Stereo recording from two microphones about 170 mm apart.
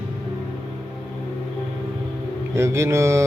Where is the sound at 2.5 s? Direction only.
15° right (ahead or behind).